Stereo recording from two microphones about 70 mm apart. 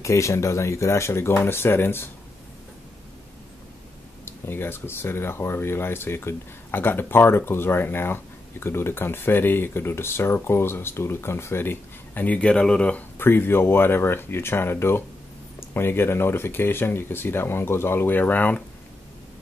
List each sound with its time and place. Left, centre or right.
0.0 s speech: left
4.3 s speech: left; by 13.0 s centre
13.2 s speech: left